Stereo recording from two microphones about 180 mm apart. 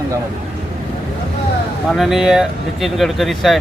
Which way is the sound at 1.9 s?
Centre (ahead or behind).